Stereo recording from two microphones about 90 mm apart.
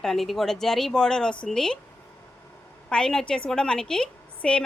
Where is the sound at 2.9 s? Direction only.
5° left (ahead or behind).